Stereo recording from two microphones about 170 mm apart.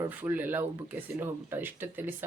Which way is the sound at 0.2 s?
10° right (ahead or behind).